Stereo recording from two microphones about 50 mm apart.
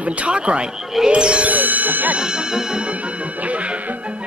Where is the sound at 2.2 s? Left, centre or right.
Centre.